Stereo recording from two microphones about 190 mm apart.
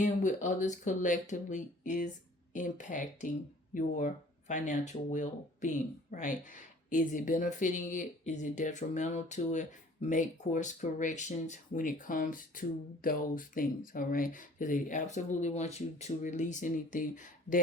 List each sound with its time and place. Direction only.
0.0 s speech: 40° left (ahead or behind)